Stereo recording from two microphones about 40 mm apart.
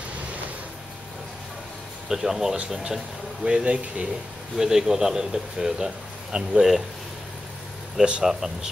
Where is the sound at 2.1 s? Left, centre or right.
Centre.